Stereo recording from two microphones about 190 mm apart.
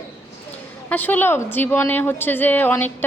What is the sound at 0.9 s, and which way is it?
A woman's voice, 10° left (ahead or behind).